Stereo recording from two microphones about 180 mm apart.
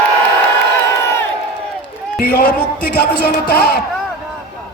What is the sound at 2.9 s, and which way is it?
Music, 60° left (ahead or behind).